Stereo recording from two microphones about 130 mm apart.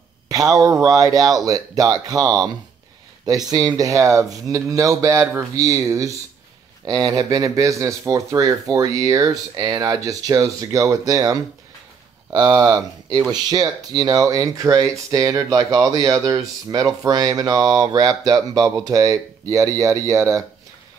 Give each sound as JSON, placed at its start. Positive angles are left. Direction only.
{"t": 0.3, "sound": "speech", "side_deg": -25}